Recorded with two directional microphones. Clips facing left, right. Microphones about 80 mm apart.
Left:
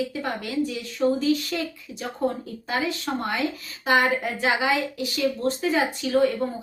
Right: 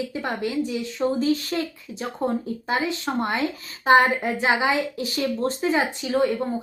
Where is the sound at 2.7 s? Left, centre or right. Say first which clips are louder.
Right 2 dB; right.